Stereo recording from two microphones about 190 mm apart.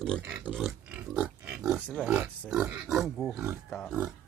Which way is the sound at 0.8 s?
5° right (ahead or behind).